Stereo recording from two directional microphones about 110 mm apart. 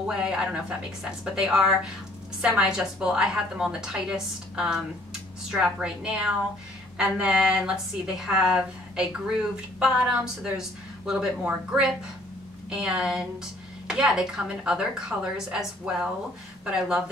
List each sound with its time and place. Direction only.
0.0 s a woman's voice: 5° right (ahead or behind)